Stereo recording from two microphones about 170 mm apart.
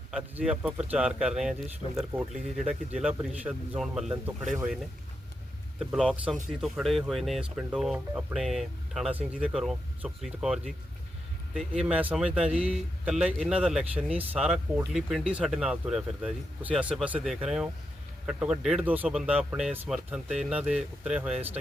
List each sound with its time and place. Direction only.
0.1 s speech: 5° right (ahead or behind)